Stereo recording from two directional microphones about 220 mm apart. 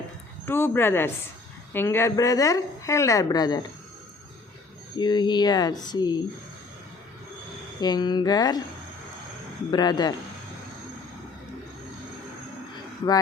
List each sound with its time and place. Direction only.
0.4 s a woman's voice: 10° left (ahead or behind)
4.9 s speech: 20° left (ahead or behind)
7.8 s a woman's voice: 20° left (ahead or behind)
9.7 s speech: 20° left (ahead or behind)